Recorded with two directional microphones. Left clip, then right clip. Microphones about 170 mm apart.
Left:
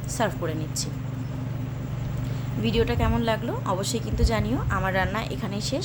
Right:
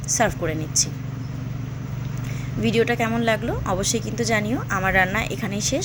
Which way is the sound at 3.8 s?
25° left (ahead or behind).